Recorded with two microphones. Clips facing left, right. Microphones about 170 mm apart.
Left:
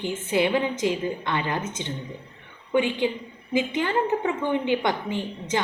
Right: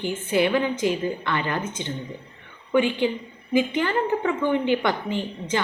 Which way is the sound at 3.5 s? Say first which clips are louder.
Right 2 dB; 20° left (ahead or behind).